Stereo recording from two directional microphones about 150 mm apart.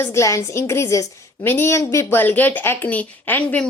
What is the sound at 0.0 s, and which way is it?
A woman's voice, 20° left (ahead or behind).